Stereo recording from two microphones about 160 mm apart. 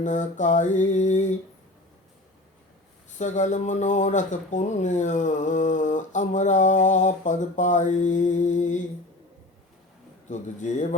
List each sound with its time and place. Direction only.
0.0 s speech: 50° left (ahead or behind)
3.2 s speech: 50° left (ahead or behind)
10.2 s speech: 50° left (ahead or behind)